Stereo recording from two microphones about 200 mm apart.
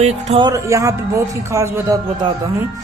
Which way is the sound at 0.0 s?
30° right (ahead or behind).